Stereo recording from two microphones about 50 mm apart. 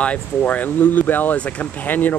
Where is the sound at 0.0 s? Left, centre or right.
Left.